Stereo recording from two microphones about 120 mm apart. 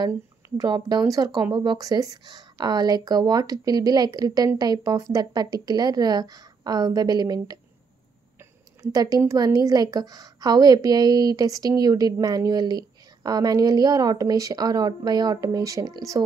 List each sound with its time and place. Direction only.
0.6 s a woman's voice: 35° right (ahead or behind)
8.8 s a woman's voice: 30° right (ahead or behind)